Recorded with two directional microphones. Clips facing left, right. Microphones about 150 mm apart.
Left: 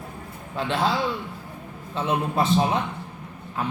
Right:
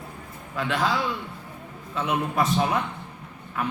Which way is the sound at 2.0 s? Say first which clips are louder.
Left 1 dB; 30° left (ahead or behind).